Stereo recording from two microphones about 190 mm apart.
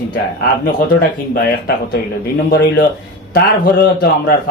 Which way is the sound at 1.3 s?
50° left (ahead or behind).